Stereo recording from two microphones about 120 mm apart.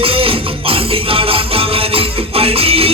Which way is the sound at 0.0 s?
50° right (ahead or behind).